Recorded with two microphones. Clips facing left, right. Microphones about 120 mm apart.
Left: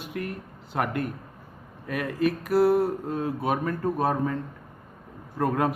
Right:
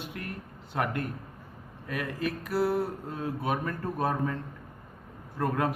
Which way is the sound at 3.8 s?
20° left (ahead or behind).